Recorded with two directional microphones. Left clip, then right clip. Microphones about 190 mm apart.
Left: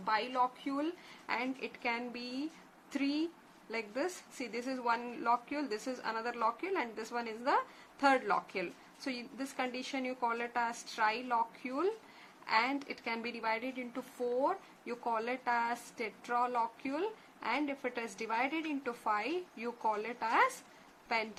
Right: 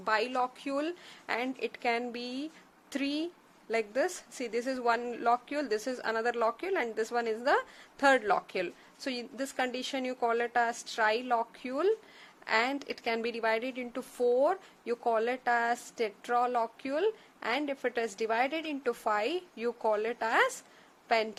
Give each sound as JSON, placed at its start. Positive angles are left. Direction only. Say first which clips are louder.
{"t": 0.0, "sound": "a woman's voice", "louder": "right 3 dB", "side_deg": -55}